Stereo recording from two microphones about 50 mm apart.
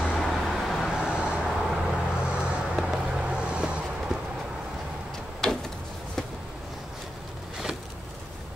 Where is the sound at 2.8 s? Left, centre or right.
Centre.